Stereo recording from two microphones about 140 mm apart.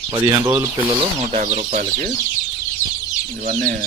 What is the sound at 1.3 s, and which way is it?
Speech, 55° right (ahead or behind).